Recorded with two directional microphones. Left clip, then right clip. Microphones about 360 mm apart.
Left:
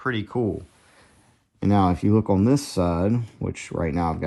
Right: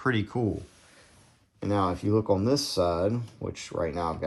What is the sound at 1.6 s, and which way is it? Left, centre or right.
Speech, left.